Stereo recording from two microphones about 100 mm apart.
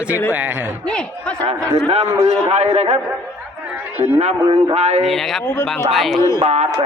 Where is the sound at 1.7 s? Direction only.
90° right.